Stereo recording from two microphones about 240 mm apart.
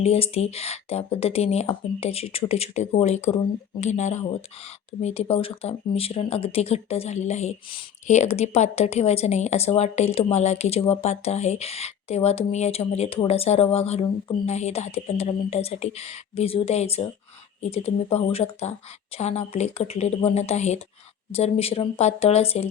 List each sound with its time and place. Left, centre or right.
0.0 s speech: left